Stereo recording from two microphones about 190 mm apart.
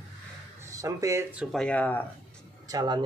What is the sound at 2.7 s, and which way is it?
Speech, 20° right (ahead or behind).